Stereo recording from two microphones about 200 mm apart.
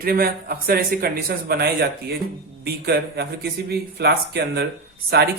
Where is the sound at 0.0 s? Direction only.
50° right (ahead or behind).